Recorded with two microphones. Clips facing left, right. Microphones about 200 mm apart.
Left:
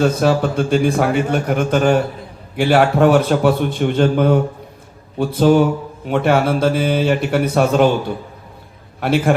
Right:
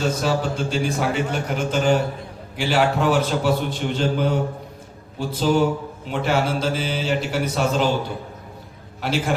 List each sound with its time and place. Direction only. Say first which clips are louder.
0.0 s a man's voice: left 7 dB; 60° left (ahead or behind)
9.0 s a man's voice: left 8 dB; 55° left (ahead or behind)